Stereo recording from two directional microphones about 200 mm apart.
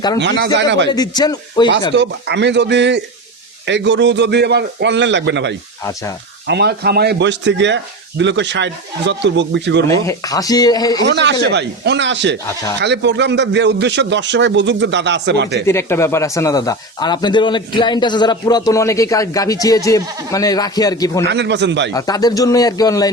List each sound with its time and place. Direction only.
0.2 s a man's voice: 60° right (ahead or behind)
0.9 s speech: 20° left (ahead or behind)
2.0 s a man's voice: 60° right (ahead or behind)
5.8 s speech: 15° left (ahead or behind)
6.5 s a man's voice: 55° right (ahead or behind)
9.9 s speech: 15° left (ahead or behind)
11.0 s a man's voice: 60° right (ahead or behind)
15.6 s speech: 15° left (ahead or behind)
21.2 s a man's voice: 60° right (ahead or behind)
21.9 s speech: 20° left (ahead or behind)